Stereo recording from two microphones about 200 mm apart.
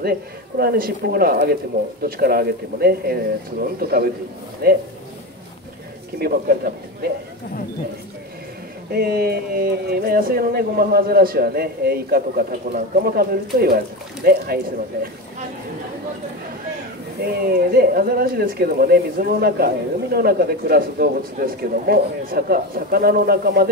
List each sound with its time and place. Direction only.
0.6 s speech: 50° right (ahead or behind)
6.1 s speech: 50° right (ahead or behind)
8.9 s speech: 50° right (ahead or behind)
17.2 s speech: 50° right (ahead or behind)